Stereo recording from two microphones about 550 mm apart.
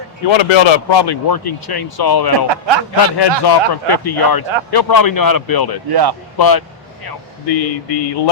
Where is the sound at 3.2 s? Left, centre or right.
Left.